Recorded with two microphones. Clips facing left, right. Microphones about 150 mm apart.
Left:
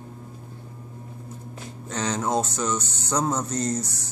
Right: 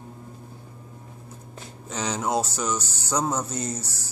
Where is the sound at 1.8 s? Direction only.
5° right (ahead or behind).